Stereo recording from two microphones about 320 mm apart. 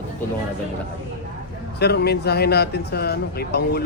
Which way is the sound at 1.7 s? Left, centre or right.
Left.